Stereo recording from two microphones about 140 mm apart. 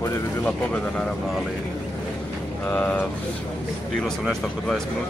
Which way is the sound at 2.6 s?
10° left (ahead or behind).